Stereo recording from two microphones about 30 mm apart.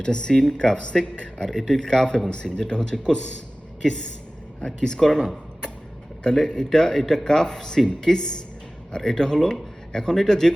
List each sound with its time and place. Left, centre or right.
0.0 s speech: left
1.5 s speech: centre; by 3.3 s left
3.8 s speech: centre
4.6 s speech: left